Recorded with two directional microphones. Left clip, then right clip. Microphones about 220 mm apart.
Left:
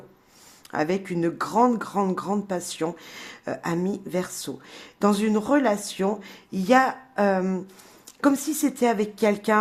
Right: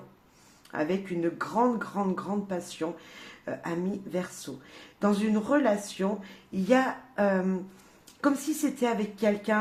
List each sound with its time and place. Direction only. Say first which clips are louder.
0.7 s speech: left 5 dB; 40° left (ahead or behind)